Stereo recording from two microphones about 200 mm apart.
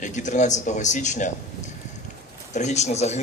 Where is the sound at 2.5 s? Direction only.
35° left (ahead or behind).